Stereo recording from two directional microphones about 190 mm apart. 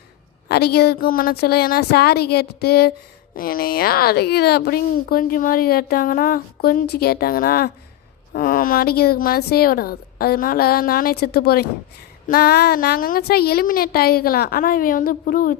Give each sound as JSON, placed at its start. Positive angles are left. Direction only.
{"t": 0.4, "sound": "a woman's voice", "side_deg": 55}